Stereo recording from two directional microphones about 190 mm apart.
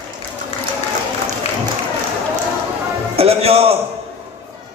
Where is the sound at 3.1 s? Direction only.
30° right (ahead or behind).